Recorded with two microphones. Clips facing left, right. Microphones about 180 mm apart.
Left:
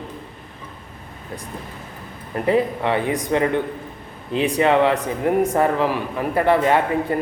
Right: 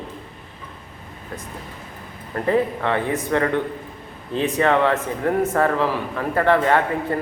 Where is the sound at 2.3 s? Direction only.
15° left (ahead or behind).